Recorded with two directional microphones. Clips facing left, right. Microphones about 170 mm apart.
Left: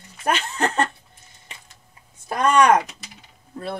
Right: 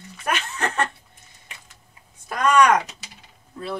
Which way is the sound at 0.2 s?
35° left (ahead or behind).